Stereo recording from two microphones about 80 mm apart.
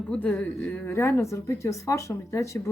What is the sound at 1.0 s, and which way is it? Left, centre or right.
Speech, left.